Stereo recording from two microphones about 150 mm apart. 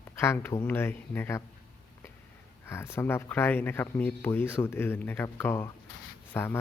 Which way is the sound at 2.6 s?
15° left (ahead or behind).